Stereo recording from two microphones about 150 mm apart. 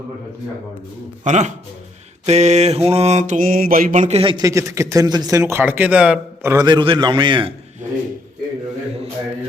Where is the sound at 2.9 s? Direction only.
45° right (ahead or behind).